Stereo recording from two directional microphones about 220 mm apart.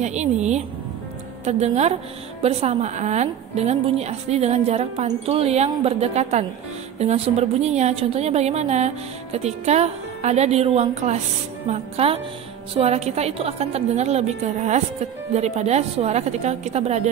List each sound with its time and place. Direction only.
0.0 s a woman's voice: 30° right (ahead or behind)